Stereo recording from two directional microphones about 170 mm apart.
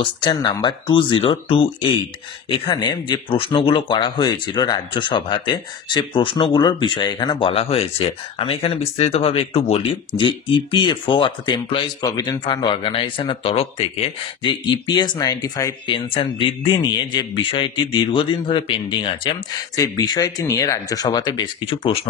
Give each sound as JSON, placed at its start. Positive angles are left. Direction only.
{"t": 0.0, "sound": "speech", "side_deg": 25}